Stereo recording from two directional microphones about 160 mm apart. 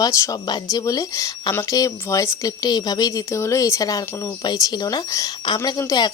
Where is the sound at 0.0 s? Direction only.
20° left (ahead or behind).